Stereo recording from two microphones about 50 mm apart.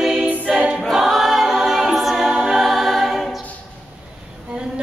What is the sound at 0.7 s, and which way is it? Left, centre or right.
Choir, centre.